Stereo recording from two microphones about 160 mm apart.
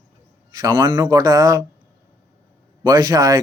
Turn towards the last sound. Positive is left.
turn(degrees=-20)  # may be behind; listen again after turning